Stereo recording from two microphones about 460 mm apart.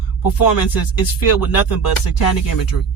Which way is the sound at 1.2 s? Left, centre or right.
Left.